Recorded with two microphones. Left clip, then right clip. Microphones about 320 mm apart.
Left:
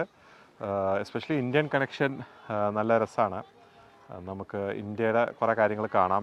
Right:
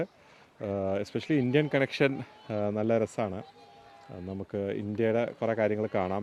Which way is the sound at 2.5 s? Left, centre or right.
Left.